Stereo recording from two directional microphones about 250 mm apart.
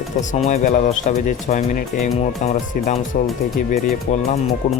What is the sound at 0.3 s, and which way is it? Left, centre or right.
Speech, left.